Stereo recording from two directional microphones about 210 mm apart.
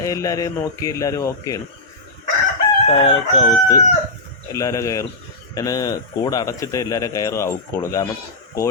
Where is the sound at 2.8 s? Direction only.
25° left (ahead or behind).